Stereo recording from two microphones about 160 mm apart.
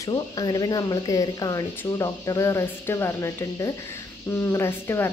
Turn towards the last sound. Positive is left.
turn(degrees=15)  # may be behind; listen again after turning